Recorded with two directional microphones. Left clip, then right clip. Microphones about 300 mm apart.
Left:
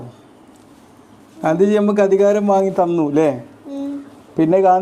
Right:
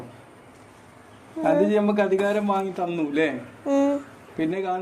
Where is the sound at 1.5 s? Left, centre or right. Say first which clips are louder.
Left 5 dB; centre.